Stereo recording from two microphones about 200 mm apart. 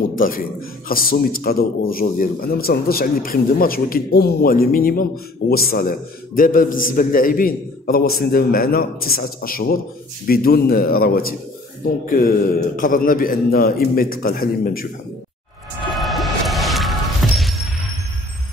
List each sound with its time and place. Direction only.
0.1 s a man's voice: 45° left (ahead or behind)
12.7 s a man's voice: 45° left (ahead or behind)
16.0 s music: centre (ahead or behind)